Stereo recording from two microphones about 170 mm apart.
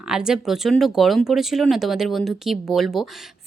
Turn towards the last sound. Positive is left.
turn(degrees=0)  # may be behind; listen again after turning